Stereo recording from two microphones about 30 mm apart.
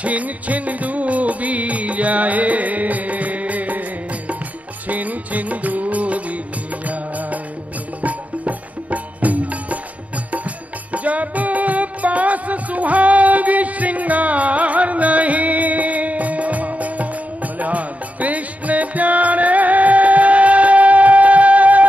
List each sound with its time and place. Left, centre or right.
0.0 s music: right
4.8 s music: right